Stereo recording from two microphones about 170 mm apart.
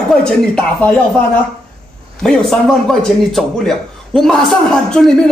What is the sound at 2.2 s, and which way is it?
A man's voice, centre (ahead or behind).